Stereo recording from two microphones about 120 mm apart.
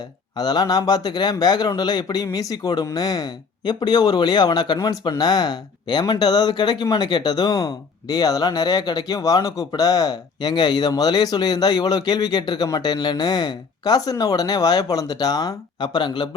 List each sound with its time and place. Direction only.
0.3 s a man's voice: 35° left (ahead or behind)